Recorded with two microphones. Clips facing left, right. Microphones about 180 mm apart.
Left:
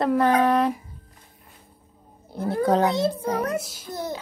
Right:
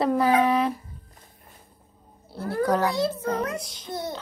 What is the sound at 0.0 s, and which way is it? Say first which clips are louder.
Speech: left 1 dB; centre (ahead or behind).